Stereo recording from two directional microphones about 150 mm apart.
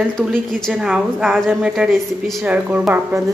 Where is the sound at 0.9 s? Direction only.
10° right (ahead or behind).